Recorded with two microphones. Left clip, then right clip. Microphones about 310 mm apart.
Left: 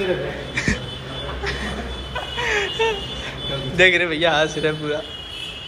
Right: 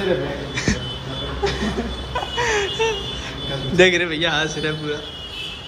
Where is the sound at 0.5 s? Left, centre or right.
Centre.